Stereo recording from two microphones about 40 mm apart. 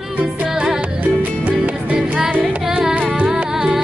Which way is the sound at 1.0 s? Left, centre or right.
Right.